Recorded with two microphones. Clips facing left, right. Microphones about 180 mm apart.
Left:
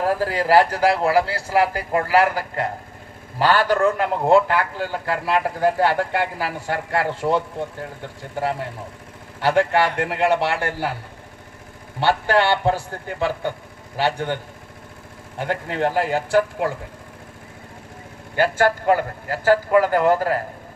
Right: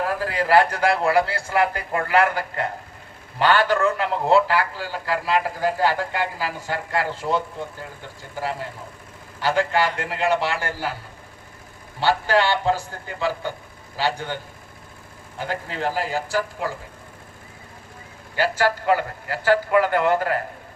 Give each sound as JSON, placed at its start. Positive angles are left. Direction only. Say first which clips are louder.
{"t": 0.0, "sound": "a man's voice", "louder": "left 3 dB", "side_deg": 40}
{"t": 9.4, "sound": "a man's voice", "louder": "left 3 dB", "side_deg": 65}
{"t": 11.9, "sound": "a man's voice", "louder": "left 1 dB", "side_deg": 60}
{"t": 15.4, "sound": "a man's voice", "louder": "left 5 dB", "side_deg": 65}
{"t": 18.3, "sound": "a man's voice", "louder": "left 3 dB", "side_deg": 50}